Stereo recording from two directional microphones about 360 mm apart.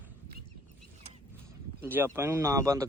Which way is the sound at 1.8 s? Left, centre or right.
Centre.